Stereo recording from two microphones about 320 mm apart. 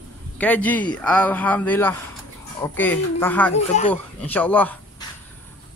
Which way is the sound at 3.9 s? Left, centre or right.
Centre.